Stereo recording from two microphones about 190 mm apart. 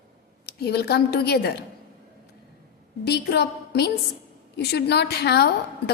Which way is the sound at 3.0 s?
60° left (ahead or behind).